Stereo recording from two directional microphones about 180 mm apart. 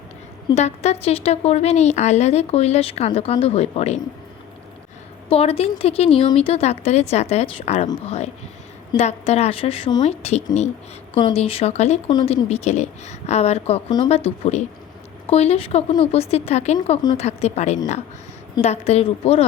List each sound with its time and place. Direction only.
0.5 s a woman's voice: 40° left (ahead or behind)
5.3 s a woman's voice: 35° left (ahead or behind)